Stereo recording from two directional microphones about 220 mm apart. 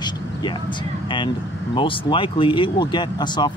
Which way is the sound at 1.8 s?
20° left (ahead or behind).